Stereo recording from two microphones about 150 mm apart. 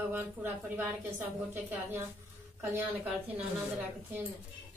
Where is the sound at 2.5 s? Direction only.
10° right (ahead or behind).